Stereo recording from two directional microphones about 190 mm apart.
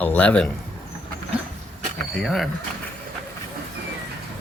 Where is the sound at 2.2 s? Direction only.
Centre (ahead or behind).